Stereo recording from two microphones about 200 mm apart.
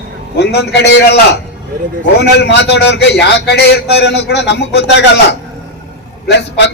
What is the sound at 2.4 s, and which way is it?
A man's voice, 60° left (ahead or behind).